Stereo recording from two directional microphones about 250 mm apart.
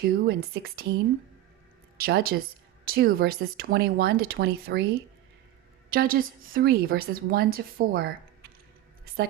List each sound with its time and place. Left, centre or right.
0.0 s a woman's voice: right
2.0 s a woman's voice: right